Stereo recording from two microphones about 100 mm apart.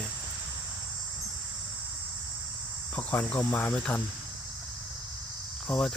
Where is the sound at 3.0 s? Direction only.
15° left (ahead or behind).